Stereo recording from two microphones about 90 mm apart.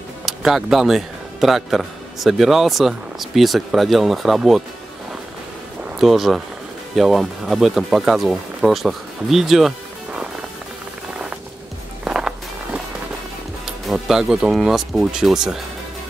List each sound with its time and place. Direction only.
0.2 s speech: 5° right (ahead or behind)
5.9 s speech: 5° right (ahead or behind)
12.0 s music: 10° right (ahead or behind)
13.7 s speech: 5° right (ahead or behind)